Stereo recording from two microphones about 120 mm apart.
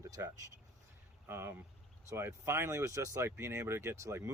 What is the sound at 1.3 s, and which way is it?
Speech, 20° right (ahead or behind).